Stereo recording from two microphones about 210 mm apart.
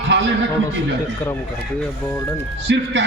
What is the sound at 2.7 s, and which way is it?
Speech, 60° right (ahead or behind).